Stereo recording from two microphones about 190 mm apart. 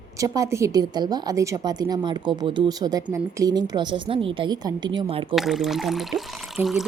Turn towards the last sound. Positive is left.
turn(degrees=0)  # may be behind; listen again after turning